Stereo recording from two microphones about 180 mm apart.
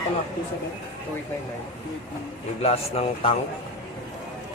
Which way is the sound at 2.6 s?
35° left (ahead or behind).